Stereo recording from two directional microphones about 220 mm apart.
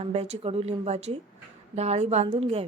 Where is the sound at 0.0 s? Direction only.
30° right (ahead or behind).